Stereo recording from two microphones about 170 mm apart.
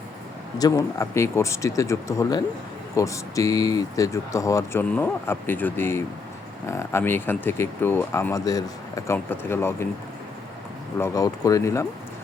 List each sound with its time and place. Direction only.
0.6 s speech: 20° left (ahead or behind)
10.9 s speech: 20° left (ahead or behind)